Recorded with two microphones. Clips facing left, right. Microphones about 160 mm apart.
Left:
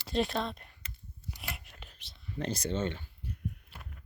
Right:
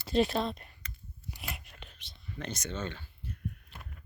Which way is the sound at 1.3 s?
Centre (ahead or behind).